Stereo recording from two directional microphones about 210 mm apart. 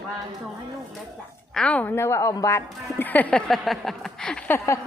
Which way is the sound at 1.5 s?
5° left (ahead or behind).